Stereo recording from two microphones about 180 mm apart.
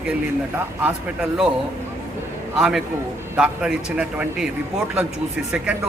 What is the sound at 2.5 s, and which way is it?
A man's voice, 5° right (ahead or behind).